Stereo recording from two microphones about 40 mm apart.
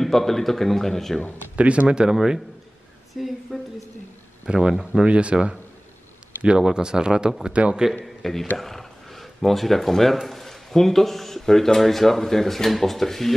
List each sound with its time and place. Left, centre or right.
0.0 s speech: centre
1.6 s speech: right
2.0 s a woman's voice: centre
4.5 s speech: centre
5.0 s speech: right
7.5 s speech: right
8.0 s a man's voice: centre